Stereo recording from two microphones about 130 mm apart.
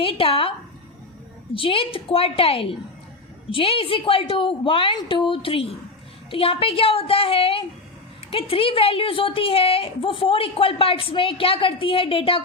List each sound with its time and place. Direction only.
0.0 s a woman's voice: 45° left (ahead or behind)
1.5 s a woman's voice: 45° left (ahead or behind)